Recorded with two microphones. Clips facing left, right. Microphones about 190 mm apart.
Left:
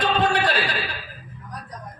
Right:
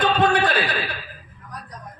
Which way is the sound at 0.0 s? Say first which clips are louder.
Right 2 dB; 50° right (ahead or behind).